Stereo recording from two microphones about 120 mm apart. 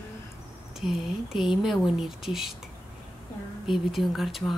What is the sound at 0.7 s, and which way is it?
Speech, 5° right (ahead or behind).